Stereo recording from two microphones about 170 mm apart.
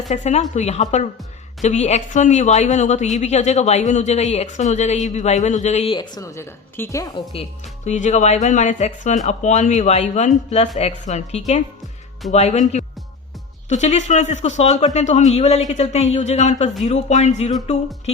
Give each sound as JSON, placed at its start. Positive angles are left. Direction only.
{"t": 0.1, "sound": "speech", "side_deg": 40}
{"t": 6.0, "sound": "a woman's voice", "side_deg": 20}
{"t": 7.9, "sound": "speech", "side_deg": 45}